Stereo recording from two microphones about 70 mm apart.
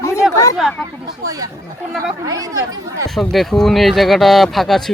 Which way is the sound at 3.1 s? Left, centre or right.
Centre.